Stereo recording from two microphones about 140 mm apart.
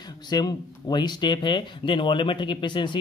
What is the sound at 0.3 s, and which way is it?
Speech, 30° left (ahead or behind).